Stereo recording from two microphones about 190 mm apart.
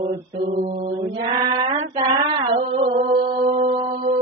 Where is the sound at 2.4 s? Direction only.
30° right (ahead or behind).